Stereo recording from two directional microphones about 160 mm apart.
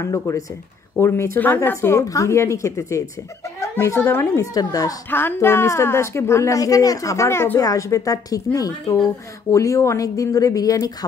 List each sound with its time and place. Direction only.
0.0 s a woman's voice: 20° left (ahead or behind)